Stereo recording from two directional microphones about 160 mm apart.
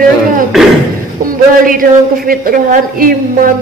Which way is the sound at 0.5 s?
Centre (ahead or behind).